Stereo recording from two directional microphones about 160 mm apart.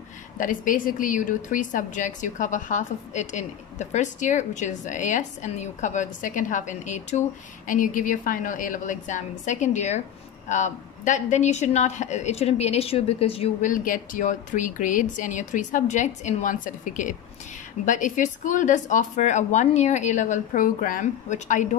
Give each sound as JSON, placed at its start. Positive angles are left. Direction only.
{"t": 0.4, "sound": "a woman's voice", "side_deg": 55}
{"t": 13.6, "sound": "a woman's voice", "side_deg": 55}